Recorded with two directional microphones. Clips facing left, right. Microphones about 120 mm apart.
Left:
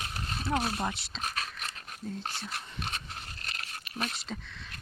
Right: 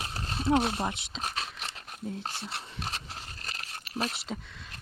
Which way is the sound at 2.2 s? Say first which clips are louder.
Right 1 dB; 30° right (ahead or behind).